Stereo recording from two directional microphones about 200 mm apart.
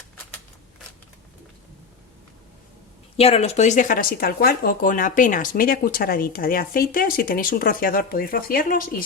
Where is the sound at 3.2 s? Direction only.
30° left (ahead or behind).